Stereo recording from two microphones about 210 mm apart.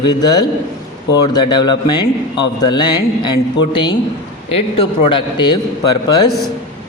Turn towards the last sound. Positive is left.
turn(degrees=20)  # may be behind; listen again after turning